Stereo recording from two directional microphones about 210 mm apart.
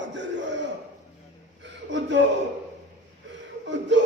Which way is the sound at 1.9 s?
60° right (ahead or behind).